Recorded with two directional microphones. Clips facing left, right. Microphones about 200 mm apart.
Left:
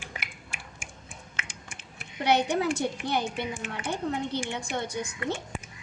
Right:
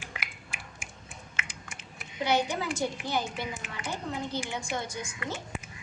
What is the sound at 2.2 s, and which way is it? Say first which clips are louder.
A woman's voice: left 4 dB; 65° left (ahead or behind).